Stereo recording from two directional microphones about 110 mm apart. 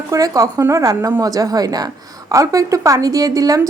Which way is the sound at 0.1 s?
30° right (ahead or behind).